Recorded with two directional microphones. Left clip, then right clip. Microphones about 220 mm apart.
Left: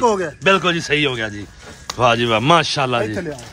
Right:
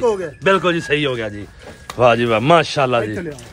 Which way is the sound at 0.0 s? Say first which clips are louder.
Left 1 dB; 35° left (ahead or behind).